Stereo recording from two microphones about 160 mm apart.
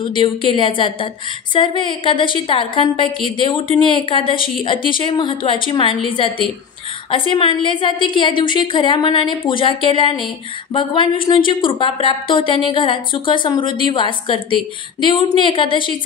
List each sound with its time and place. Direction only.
0.0 s a woman's voice: 30° left (ahead or behind)